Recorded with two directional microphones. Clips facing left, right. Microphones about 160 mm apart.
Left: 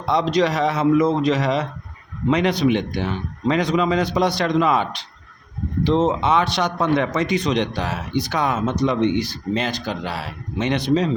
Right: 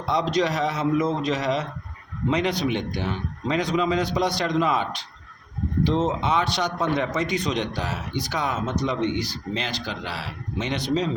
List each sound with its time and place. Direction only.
0.1 s a man's voice: 70° left (ahead or behind)
8.3 s speech: 55° left (ahead or behind)